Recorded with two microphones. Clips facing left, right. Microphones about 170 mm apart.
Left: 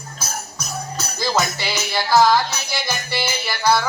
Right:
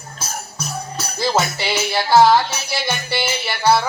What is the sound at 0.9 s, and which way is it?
Music, 30° right (ahead or behind).